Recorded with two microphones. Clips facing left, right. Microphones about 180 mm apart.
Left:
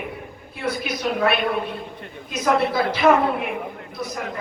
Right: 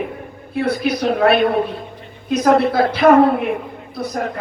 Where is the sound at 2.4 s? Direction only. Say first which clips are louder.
Right 5 dB; 55° right (ahead or behind).